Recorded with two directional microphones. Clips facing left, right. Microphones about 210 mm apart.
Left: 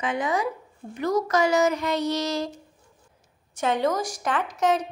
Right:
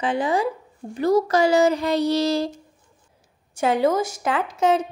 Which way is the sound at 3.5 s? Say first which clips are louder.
Right 4 dB; 30° right (ahead or behind).